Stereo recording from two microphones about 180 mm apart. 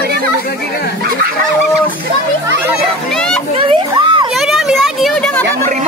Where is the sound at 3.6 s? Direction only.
30° right (ahead or behind).